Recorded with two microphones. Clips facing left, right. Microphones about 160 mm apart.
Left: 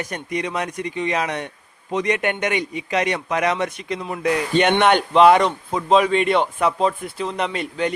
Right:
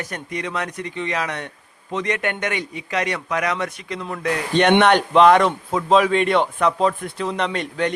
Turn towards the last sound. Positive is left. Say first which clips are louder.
# right 1 dB
turn(degrees=5)  # may be behind; listen again after turning